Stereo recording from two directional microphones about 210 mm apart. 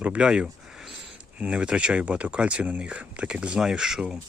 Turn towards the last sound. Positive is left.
turn(degrees=-5)  # may be behind; listen again after turning